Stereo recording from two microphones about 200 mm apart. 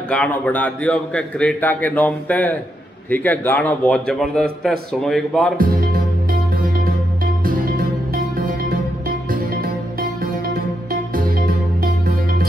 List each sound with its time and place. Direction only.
0.1 s a man's voice: 5° left (ahead or behind)
7.4 s music: 45° right (ahead or behind)